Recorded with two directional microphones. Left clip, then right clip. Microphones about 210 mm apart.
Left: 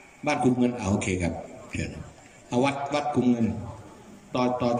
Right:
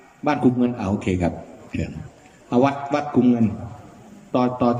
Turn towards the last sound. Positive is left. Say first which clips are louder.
# right 5 dB
turn(degrees=-20)  # may be behind; listen again after turning